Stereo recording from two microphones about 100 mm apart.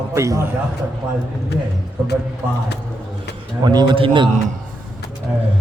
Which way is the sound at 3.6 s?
45° right (ahead or behind).